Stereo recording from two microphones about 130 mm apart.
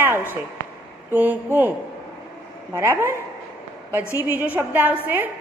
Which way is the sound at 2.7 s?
20° right (ahead or behind).